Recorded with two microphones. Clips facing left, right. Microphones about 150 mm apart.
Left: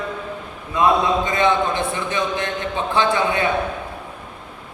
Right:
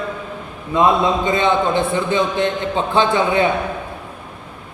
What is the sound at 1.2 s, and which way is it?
A man's voice, 25° right (ahead or behind).